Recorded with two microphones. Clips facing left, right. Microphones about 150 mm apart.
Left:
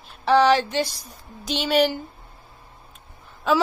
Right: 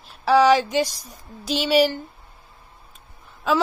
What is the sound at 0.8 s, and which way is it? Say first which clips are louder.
Speech: right 4 dB; 40° right (ahead or behind).